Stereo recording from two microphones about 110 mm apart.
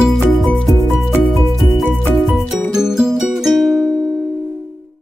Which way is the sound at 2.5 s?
Centre (ahead or behind).